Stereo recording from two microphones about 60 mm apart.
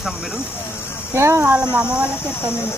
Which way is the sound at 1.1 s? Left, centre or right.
Right.